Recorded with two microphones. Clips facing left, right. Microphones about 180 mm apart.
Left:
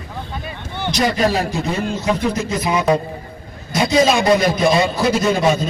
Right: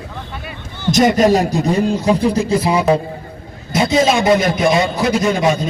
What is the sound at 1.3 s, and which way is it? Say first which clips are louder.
A man's voice: right 6 dB; 40° right (ahead or behind).